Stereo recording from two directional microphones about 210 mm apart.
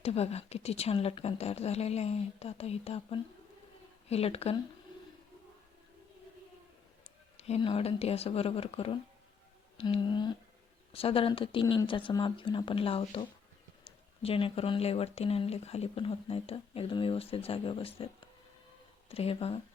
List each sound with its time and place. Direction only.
0.0 s speech: 30° left (ahead or behind)
7.3 s speech: 30° left (ahead or behind)